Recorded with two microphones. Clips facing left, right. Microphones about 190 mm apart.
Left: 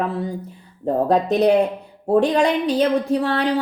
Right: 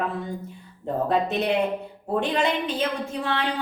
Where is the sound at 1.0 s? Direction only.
40° left (ahead or behind).